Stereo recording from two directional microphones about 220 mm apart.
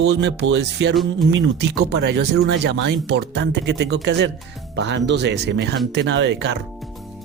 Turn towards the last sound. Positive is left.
turn(degrees=-50)  # may be behind; listen again after turning